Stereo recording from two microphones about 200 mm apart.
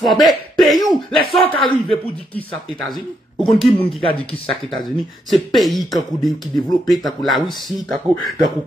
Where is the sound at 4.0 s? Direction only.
25° left (ahead or behind).